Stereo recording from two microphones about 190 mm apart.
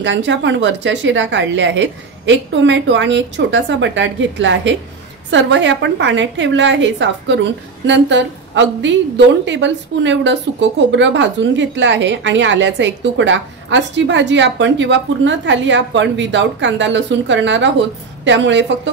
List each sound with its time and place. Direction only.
0.0 s a woman's voice: 70° right (ahead or behind)